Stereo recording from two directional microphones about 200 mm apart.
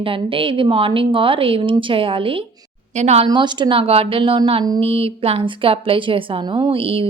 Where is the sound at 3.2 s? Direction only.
20° right (ahead or behind).